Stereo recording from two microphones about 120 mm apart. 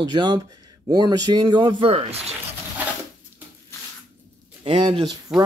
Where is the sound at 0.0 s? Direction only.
35° right (ahead or behind); by 2.3 s 55° right (ahead or behind).